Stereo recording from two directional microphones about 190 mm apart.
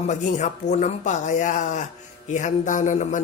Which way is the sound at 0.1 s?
40° left (ahead or behind).